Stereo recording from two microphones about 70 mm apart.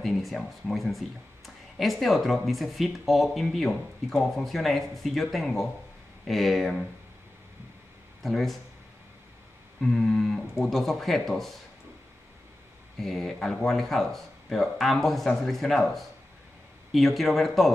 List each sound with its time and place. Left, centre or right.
0.0 s speech: centre
8.2 s speech: centre
9.8 s a sound: centre
10.5 s speech: centre
13.0 s speech: centre